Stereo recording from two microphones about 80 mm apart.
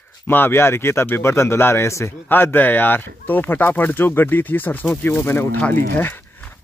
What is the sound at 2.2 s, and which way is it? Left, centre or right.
Speech, left.